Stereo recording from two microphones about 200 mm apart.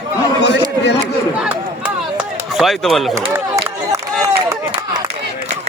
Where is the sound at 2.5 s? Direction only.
Centre (ahead or behind).